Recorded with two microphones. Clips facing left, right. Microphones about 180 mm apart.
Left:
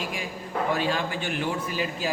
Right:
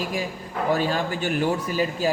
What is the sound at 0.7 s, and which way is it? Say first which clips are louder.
A man's voice: right 5 dB; 40° right (ahead or behind).